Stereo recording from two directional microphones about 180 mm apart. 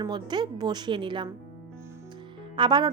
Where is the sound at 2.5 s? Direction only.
25° right (ahead or behind).